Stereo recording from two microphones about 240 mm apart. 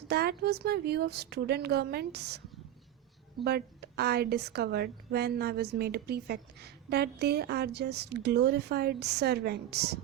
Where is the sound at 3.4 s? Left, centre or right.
Right.